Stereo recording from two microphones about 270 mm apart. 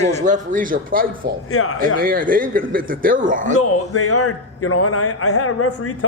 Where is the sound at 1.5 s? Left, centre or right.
Left.